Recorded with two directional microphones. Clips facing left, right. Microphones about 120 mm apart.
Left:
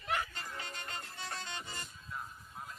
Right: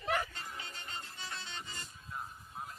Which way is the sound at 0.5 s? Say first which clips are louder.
Left 2 dB; 55° left (ahead or behind).